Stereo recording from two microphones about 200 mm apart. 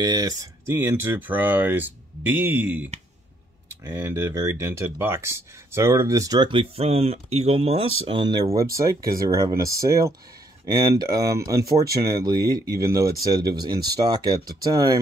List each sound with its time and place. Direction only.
0.0 s speech: 20° right (ahead or behind)